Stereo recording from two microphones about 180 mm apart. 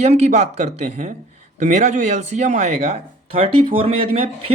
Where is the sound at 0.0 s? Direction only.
40° right (ahead or behind).